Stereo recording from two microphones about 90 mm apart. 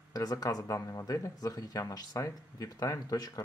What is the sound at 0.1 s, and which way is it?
Speech, 45° left (ahead or behind).